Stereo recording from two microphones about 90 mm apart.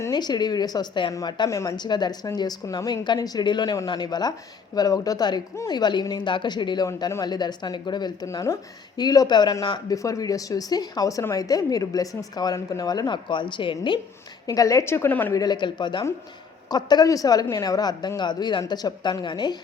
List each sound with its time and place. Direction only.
0.1 s speech: 50° left (ahead or behind)
1.5 s a woman's voice: 35° left (ahead or behind)
1.7 s speech: 55° left (ahead or behind)
9.9 s speech: 40° left (ahead or behind); by 14.0 s 65° left (ahead or behind)
14.4 s a woman's voice: 40° left (ahead or behind); by 15.3 s 25° left (ahead or behind)
15.3 s speech: 45° left (ahead or behind)
16.6 s speech: 50° left (ahead or behind)